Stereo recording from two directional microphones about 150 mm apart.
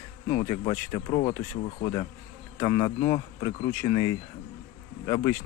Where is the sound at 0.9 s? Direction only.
35° left (ahead or behind).